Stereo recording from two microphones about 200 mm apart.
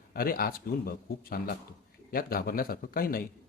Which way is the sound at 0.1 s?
45° left (ahead or behind).